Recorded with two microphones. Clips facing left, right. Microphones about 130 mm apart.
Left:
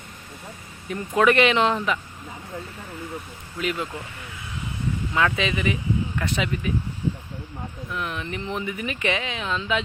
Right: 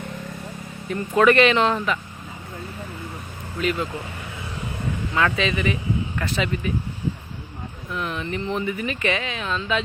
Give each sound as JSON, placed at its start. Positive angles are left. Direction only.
{"t": 0.9, "sound": "speech", "side_deg": 10}
{"t": 3.6, "sound": "speech", "side_deg": 15}
{"t": 5.1, "sound": "speech", "side_deg": 10}
{"t": 7.9, "sound": "speech", "side_deg": 10}